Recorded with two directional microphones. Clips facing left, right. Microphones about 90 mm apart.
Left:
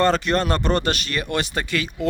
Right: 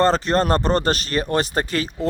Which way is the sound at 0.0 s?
35° right (ahead or behind).